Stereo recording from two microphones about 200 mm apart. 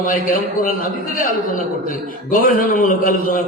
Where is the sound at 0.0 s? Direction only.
45° left (ahead or behind).